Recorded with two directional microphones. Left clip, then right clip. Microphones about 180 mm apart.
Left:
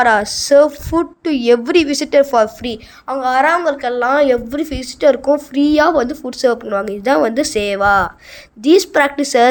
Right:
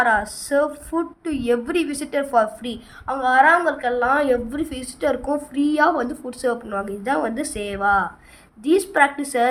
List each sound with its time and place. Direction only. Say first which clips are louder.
0.0 s a woman's voice: left 6 dB; 40° left (ahead or behind)